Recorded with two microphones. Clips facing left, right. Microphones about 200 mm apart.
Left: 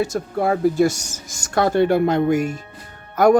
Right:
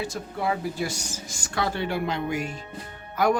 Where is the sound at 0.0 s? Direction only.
45° left (ahead or behind).